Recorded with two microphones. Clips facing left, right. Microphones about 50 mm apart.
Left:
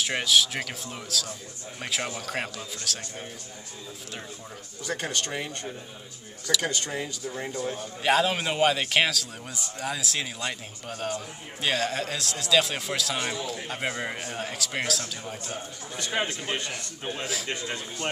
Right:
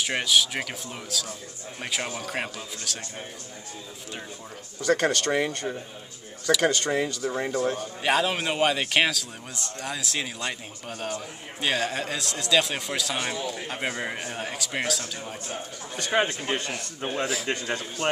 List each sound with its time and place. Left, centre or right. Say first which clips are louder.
0.0 s a man's voice: even; centre
4.8 s speech: right 8 dB; right
8.0 s a man's voice: left 1 dB; centre
16.0 s a man's voice: right 5 dB; right